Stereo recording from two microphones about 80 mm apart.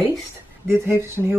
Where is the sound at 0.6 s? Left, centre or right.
Right.